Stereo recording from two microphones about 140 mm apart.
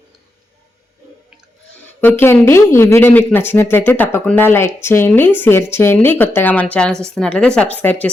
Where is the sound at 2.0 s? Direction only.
15° left (ahead or behind).